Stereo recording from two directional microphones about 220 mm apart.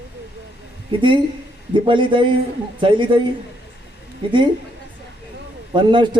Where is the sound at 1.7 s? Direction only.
20° right (ahead or behind).